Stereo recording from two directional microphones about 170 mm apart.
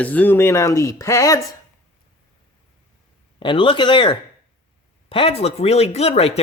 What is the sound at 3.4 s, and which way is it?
Speech, 30° left (ahead or behind).